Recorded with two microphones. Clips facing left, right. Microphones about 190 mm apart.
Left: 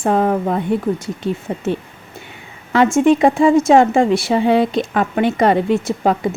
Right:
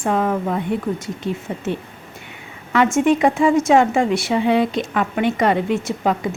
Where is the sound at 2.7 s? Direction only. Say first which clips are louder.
Left 3 dB; 30° left (ahead or behind).